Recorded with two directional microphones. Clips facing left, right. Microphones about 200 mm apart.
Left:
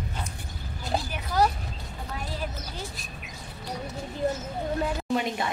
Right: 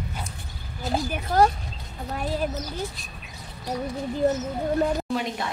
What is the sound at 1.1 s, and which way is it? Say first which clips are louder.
Speech: right 5 dB; 50° right (ahead or behind).